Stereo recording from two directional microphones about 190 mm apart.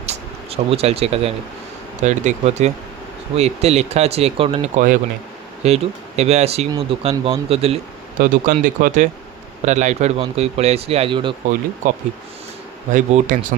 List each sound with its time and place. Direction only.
0.0 s a sound: 30° right (ahead or behind)
2.0 s speech: 40° right (ahead or behind)
8.2 s speech: 45° right (ahead or behind); by 11.3 s 25° right (ahead or behind)
12.9 s speech: 40° right (ahead or behind)